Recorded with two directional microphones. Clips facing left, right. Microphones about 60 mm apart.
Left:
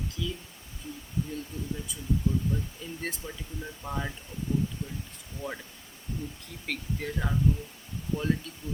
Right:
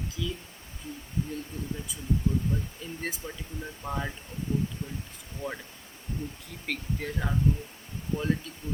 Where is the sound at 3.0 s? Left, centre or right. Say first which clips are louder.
Right 1 dB; centre.